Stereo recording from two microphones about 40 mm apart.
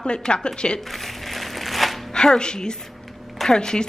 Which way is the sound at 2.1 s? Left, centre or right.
Left.